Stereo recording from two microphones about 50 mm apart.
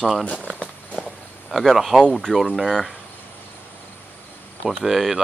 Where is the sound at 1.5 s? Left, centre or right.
Centre.